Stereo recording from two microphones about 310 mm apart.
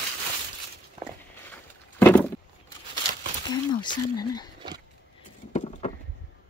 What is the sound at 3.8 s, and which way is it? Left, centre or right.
Speech, centre.